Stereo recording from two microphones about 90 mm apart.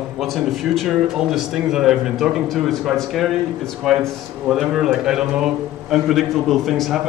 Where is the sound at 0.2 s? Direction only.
Centre (ahead or behind).